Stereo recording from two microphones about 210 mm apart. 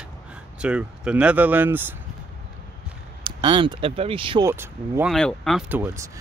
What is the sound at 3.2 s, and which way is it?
Speech, 25° right (ahead or behind).